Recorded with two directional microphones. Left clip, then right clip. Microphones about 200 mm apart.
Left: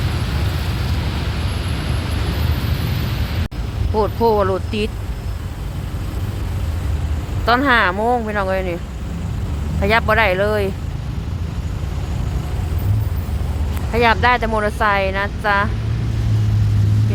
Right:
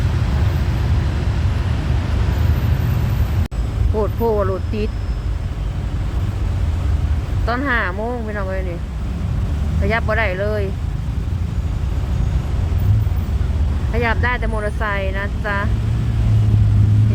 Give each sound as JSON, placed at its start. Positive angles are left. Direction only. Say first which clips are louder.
{"t": 3.9, "sound": "speech", "louder": "left 3 dB", "side_deg": 20}
{"t": 7.4, "sound": "speech", "louder": "left 6 dB", "side_deg": 25}
{"t": 9.8, "sound": "speech", "louder": "left 5 dB", "side_deg": 30}
{"t": 13.9, "sound": "speech", "louder": "left 6 dB", "side_deg": 25}